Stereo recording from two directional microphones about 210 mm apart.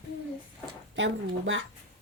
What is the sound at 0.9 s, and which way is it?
Speech, 60° right (ahead or behind).